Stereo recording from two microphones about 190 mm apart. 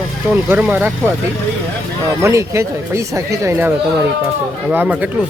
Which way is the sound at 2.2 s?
15° right (ahead or behind).